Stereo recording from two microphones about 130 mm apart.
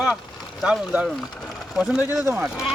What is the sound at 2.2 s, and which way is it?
Speech, 20° right (ahead or behind).